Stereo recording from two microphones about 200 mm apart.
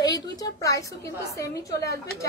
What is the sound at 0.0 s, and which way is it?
A woman's voice, 20° left (ahead or behind).